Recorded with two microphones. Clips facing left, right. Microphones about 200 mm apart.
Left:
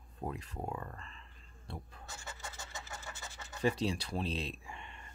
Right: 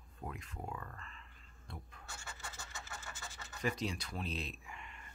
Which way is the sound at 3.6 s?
30° left (ahead or behind).